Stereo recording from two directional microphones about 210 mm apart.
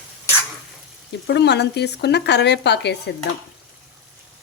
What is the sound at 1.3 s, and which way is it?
Speech, 55° left (ahead or behind).